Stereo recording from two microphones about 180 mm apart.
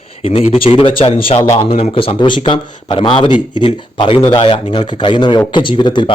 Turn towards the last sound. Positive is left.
turn(degrees=25)  # may be behind; listen again after turning